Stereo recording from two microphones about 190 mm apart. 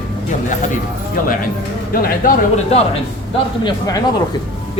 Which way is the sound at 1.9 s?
50° left (ahead or behind).